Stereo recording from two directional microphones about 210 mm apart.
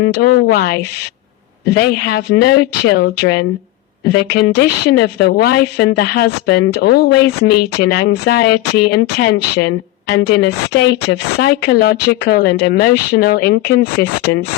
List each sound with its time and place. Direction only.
0.0 s a woman's voice: 50° left (ahead or behind)